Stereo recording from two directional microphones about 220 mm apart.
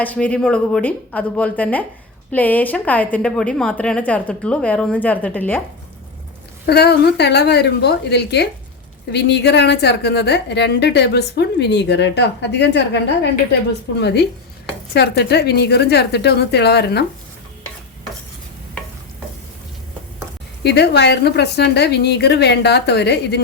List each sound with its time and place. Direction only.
0.0 s a woman's voice: 5° left (ahead or behind)
6.7 s a woman's voice: 50° left (ahead or behind)
14.0 s a woman's voice: 50° left (ahead or behind)
20.7 s a woman's voice: 50° left (ahead or behind)